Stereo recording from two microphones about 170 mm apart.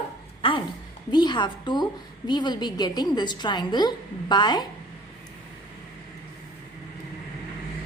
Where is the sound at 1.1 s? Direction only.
25° left (ahead or behind).